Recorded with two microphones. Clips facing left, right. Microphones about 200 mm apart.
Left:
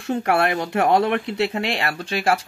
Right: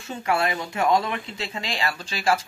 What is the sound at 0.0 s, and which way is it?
Speech, 60° left (ahead or behind).